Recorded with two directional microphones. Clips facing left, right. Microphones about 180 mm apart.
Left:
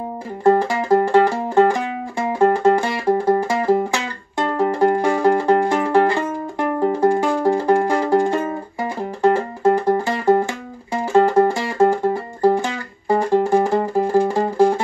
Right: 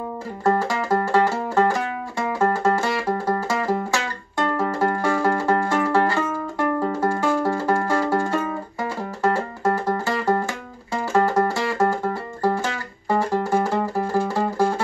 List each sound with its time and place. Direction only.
0.4 s music: 15° left (ahead or behind)
4.4 s music: 15° left (ahead or behind)